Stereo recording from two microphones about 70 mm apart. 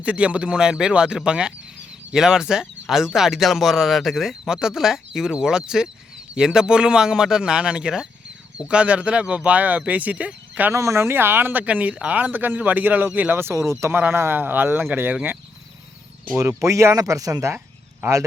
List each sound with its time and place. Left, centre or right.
0.0 s speech: centre
10.7 s speech: right
11.6 s speech: right
13.4 s speech: right
13.9 s speech: right
16.5 s speech: right